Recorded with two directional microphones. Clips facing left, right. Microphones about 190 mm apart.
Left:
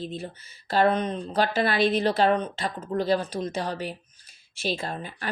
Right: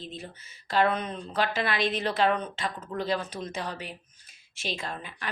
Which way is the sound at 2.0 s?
35° left (ahead or behind).